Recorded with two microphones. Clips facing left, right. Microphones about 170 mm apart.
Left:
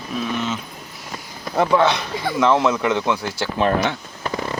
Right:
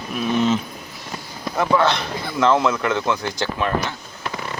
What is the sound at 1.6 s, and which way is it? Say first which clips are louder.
Speech: left 2 dB; 15° left (ahead or behind).